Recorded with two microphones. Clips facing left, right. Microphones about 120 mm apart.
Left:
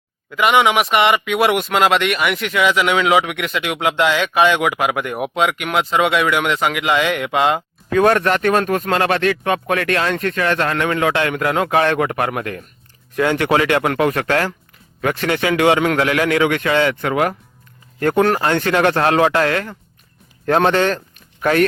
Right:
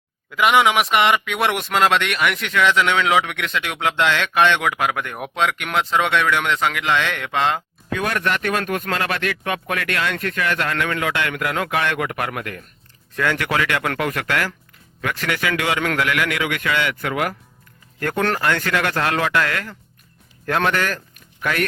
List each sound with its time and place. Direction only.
0.3 s a man's voice: centre (ahead or behind)
7.9 s speech: 35° left (ahead or behind)